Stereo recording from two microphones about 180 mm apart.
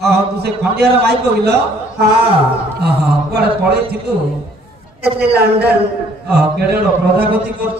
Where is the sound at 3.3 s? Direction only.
65° right (ahead or behind).